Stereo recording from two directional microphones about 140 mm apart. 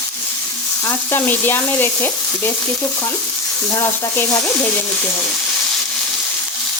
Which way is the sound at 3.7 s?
20° left (ahead or behind).